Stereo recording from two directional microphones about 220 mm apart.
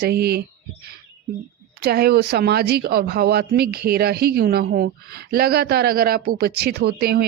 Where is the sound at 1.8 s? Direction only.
45° right (ahead or behind).